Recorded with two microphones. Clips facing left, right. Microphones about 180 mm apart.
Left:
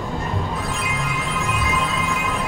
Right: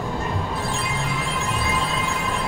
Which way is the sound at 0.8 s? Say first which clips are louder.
Left 1 dB; 30° right (ahead or behind).